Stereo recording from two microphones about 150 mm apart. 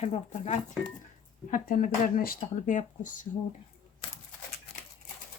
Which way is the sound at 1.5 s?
65° left (ahead or behind).